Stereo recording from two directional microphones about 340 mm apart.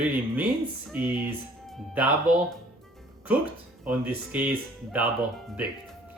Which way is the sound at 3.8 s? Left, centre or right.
Centre.